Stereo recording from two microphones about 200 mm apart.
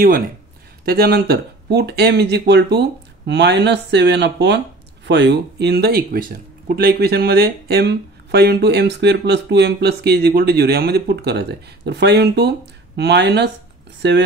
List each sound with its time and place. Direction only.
0.8 s speech: 50° right (ahead or behind)